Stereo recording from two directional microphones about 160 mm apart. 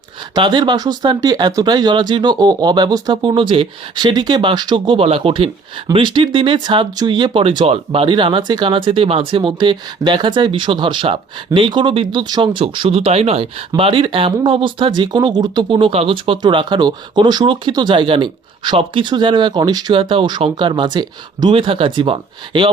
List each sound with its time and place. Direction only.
0.3 s speech: 25° right (ahead or behind)